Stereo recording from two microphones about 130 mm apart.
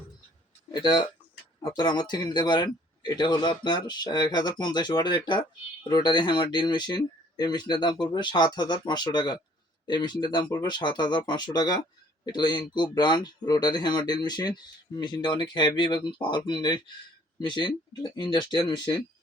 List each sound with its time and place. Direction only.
0.7 s speech: 35° left (ahead or behind)